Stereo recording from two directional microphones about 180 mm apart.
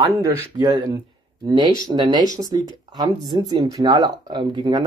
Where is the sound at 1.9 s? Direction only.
25° right (ahead or behind).